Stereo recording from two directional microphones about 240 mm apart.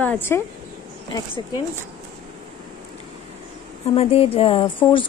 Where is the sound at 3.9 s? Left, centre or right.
Left.